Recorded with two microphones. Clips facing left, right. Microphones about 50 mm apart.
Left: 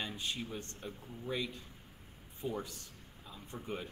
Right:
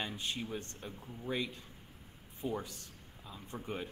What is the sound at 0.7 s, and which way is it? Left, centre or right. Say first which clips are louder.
Speech: even; centre.